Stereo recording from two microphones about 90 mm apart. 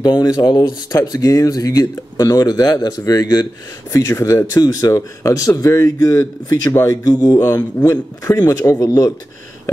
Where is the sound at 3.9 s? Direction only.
35° left (ahead or behind).